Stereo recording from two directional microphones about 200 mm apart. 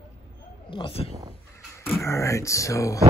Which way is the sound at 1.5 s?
15° left (ahead or behind).